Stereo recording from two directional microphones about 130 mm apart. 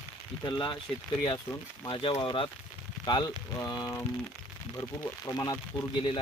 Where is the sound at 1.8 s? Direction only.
40° left (ahead or behind).